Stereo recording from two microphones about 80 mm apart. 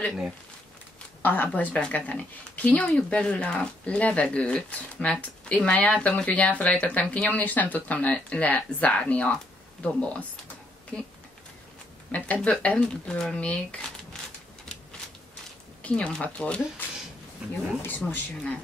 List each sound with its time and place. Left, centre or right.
1.2 s speech: left
12.1 s speech: centre
15.8 s speech: centre
17.4 s speech: centre
17.8 s speech: left